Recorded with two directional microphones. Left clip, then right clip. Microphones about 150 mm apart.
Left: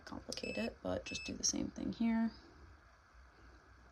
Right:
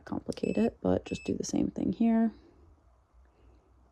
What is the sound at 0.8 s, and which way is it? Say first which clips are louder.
Speech: right 10 dB; 25° right (ahead or behind).